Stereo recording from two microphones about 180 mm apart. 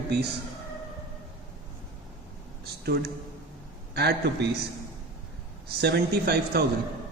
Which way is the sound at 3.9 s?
60° right (ahead or behind).